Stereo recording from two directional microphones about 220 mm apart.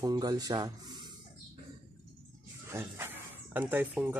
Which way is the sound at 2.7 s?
10° right (ahead or behind).